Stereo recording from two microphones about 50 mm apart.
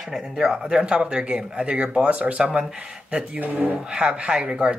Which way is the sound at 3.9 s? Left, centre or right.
Centre.